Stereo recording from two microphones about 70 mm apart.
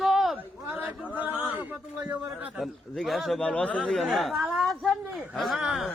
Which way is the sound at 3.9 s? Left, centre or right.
Centre.